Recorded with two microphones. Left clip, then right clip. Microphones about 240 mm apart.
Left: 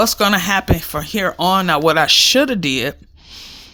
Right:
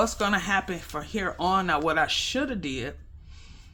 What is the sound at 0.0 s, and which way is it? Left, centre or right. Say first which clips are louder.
Speech: left 10 dB; left.